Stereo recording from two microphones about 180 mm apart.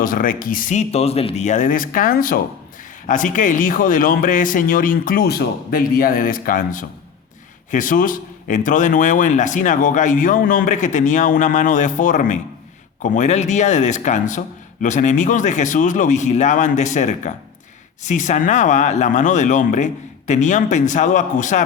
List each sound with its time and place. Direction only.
0.0 s a man's voice: 50° left (ahead or behind)